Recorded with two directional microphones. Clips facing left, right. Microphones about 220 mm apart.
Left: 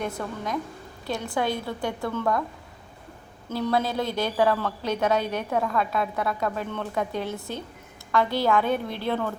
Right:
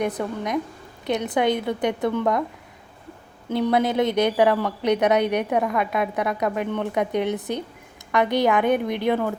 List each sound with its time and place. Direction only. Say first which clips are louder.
0.0 s speech: right 5 dB; 20° right (ahead or behind)
3.5 s a woman's voice: right 5 dB; 20° right (ahead or behind)